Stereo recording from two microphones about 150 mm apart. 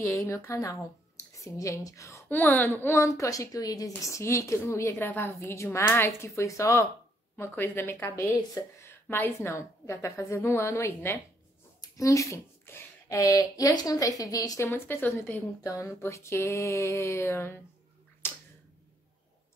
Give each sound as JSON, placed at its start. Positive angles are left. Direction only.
{"t": 0.0, "sound": "a woman's voice", "side_deg": 20}
{"t": 18.2, "sound": "finger snapping", "side_deg": 15}